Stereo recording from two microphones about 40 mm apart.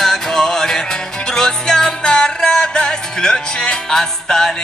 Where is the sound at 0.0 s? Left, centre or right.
Centre.